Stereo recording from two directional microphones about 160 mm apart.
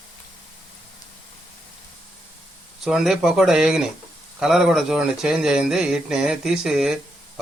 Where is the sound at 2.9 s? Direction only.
5° right (ahead or behind).